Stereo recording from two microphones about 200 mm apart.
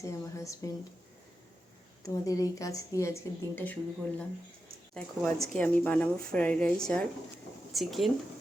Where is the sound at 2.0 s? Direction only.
15° left (ahead or behind).